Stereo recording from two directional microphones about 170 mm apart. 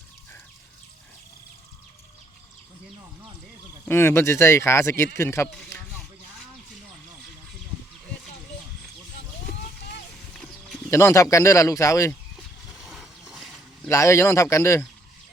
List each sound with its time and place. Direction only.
3.8 s speech: 15° left (ahead or behind)
10.3 s livestock: 5° left (ahead or behind)
10.8 s speech: 15° left (ahead or behind)
12.7 s a sound: centre (ahead or behind)
13.8 s speech: 15° left (ahead or behind)